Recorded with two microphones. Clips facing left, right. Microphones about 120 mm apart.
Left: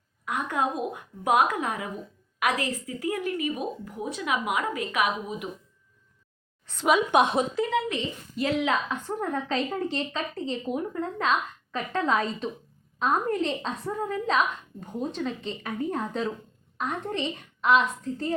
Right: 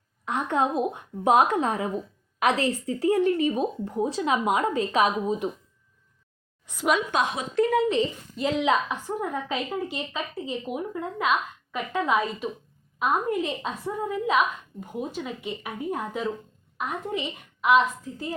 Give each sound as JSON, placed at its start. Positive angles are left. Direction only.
{"t": 0.3, "sound": "speech", "side_deg": -25}
{"t": 6.7, "sound": "a woman's voice", "side_deg": -15}
{"t": 7.1, "sound": "a woman's voice", "side_deg": 25}
{"t": 8.4, "sound": "speech", "side_deg": -20}
{"t": 9.0, "sound": "a woman's voice", "side_deg": -10}